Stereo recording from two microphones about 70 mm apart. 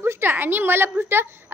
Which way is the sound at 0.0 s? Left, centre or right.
Right.